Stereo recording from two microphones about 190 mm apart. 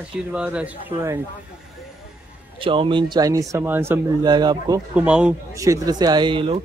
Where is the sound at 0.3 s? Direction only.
5° right (ahead or behind).